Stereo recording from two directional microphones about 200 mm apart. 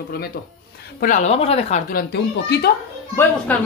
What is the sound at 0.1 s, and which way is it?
Speech, 50° left (ahead or behind).